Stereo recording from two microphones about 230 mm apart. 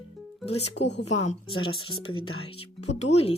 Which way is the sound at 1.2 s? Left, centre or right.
Left.